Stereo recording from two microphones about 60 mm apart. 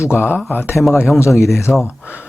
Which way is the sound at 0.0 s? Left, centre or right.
Left.